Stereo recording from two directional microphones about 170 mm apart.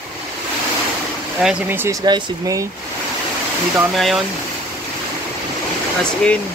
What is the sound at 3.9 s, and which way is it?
Speech, centre (ahead or behind).